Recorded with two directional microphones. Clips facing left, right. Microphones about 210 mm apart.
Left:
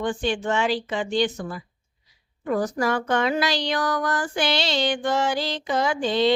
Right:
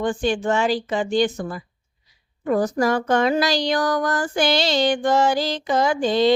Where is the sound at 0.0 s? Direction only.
45° right (ahead or behind).